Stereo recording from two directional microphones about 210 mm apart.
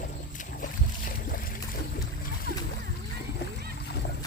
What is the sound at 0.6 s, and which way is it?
Boat, 40° left (ahead or behind).